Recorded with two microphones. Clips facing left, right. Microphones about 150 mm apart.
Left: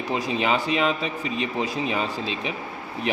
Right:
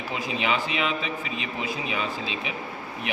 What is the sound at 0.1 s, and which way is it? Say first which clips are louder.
A man's voice: left 4 dB; 40° left (ahead or behind).